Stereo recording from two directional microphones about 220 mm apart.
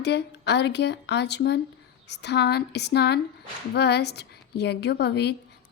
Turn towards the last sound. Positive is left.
turn(degrees=50)  # may be behind; listen again after turning